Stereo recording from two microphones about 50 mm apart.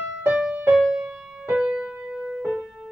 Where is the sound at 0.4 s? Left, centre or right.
Centre.